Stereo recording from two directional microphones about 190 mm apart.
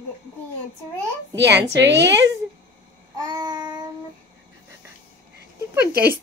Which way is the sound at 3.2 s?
20° right (ahead or behind).